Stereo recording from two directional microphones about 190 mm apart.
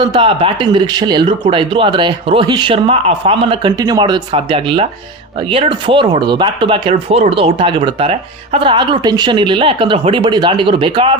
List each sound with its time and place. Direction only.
0.0 s speech: 25° right (ahead or behind)